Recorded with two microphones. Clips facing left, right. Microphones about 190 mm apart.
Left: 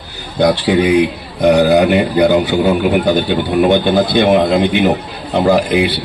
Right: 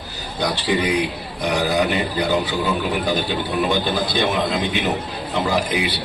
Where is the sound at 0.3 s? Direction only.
60° left (ahead or behind).